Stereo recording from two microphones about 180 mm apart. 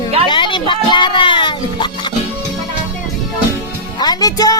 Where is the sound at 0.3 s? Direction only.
25° left (ahead or behind).